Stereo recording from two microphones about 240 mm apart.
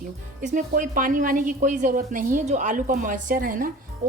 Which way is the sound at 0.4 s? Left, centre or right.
Right.